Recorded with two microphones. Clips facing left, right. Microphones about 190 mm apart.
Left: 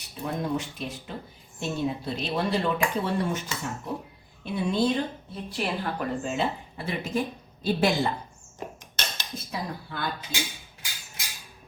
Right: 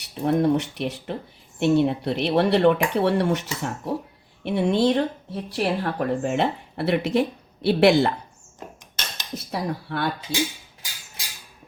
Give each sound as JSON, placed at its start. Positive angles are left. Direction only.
{"t": 0.0, "sound": "speech", "side_deg": -70}
{"t": 9.3, "sound": "speech", "side_deg": -70}